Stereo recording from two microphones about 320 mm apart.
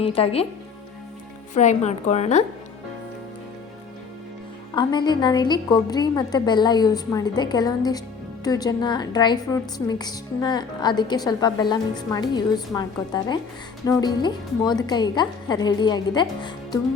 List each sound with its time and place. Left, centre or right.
0.0 s a woman's voice: centre
1.5 s speech: left
4.7 s a woman's voice: centre